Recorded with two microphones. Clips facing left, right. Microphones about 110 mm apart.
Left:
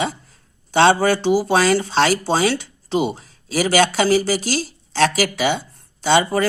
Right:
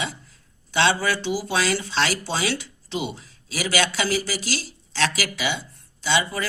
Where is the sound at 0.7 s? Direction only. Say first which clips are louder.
Left 7 dB; 45° left (ahead or behind).